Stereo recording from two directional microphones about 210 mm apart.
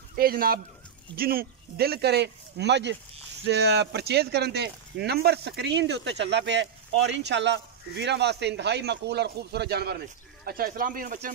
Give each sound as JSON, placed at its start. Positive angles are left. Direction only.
{"t": 0.1, "sound": "speech", "side_deg": -45}